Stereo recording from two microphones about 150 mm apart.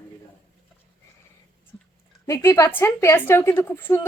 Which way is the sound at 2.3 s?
20° left (ahead or behind).